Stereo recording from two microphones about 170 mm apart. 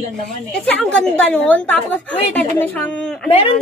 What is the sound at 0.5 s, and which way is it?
A woman's voice, 5° left (ahead or behind).